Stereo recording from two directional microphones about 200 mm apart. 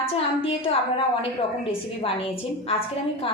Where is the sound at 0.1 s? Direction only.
30° left (ahead or behind).